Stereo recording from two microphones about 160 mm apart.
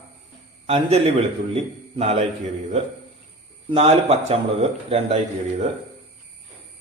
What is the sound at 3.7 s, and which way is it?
Speech, 40° right (ahead or behind).